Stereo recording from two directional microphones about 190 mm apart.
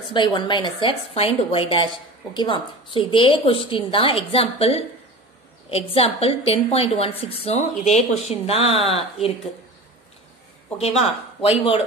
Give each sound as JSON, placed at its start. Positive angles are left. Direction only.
{"t": 0.1, "sound": "a woman's voice", "side_deg": 25}
{"t": 10.8, "sound": "a woman's voice", "side_deg": 30}